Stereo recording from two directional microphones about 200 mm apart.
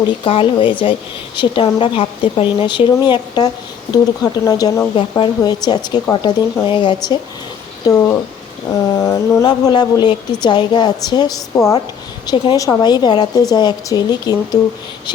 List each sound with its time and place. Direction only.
0.3 s a woman's voice: 25° left (ahead or behind)